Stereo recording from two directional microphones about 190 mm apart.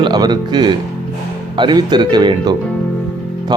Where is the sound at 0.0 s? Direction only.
20° right (ahead or behind).